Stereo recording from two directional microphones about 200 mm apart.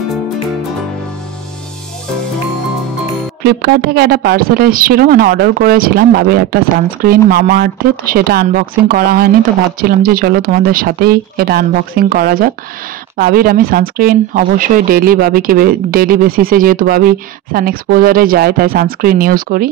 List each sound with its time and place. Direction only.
3.4 s speech: 55° right (ahead or behind)